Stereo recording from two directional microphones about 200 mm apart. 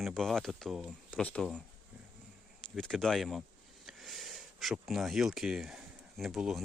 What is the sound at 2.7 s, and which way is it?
Speech, 5° left (ahead or behind).